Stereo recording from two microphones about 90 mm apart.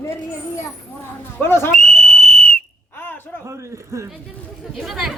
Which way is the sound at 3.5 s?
35° right (ahead or behind).